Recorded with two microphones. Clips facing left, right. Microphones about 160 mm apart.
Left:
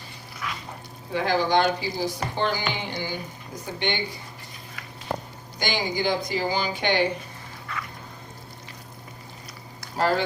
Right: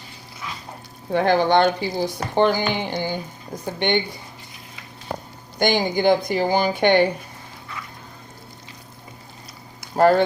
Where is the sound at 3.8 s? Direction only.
55° right (ahead or behind).